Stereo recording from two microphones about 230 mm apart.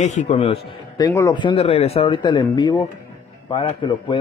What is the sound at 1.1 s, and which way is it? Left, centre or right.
A man's voice, centre.